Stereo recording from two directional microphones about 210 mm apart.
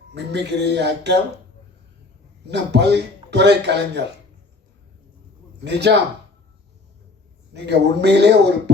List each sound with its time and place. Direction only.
0.1 s speech: 55° right (ahead or behind)
2.5 s speech: 55° right (ahead or behind)
5.6 s speech: 55° right (ahead or behind)
7.5 s speech: 55° right (ahead or behind)